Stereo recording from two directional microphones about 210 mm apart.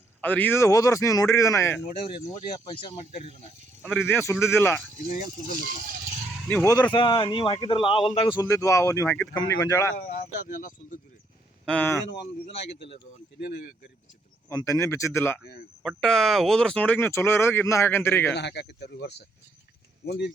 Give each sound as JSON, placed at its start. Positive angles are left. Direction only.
{"t": 0.2, "sound": "speech", "side_deg": 10}
{"t": 3.8, "sound": "speech", "side_deg": 10}
{"t": 5.0, "sound": "speech", "side_deg": 35}
{"t": 6.7, "sound": "speech", "side_deg": 15}
{"t": 10.0, "sound": "speech", "side_deg": 40}
{"t": 11.6, "sound": "speech", "side_deg": 5}
{"t": 14.5, "sound": "speech", "side_deg": 15}
{"t": 18.3, "sound": "speech", "side_deg": 55}